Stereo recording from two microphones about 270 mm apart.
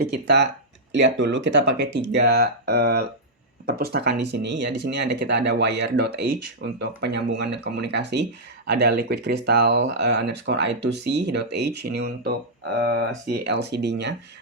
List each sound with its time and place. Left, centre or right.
0.0 s speech: right